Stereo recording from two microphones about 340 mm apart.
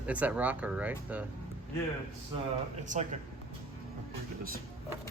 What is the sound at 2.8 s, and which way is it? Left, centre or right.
Speech, right.